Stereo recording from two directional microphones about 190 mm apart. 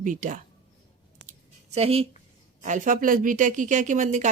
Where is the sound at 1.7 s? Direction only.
30° right (ahead or behind).